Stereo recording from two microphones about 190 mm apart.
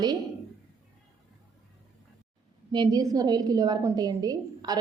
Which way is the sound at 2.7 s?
20° right (ahead or behind).